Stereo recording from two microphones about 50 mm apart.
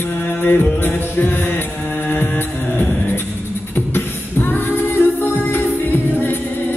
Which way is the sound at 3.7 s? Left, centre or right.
Left.